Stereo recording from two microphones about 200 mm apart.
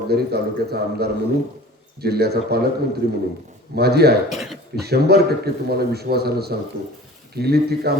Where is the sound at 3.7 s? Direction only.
55° right (ahead or behind).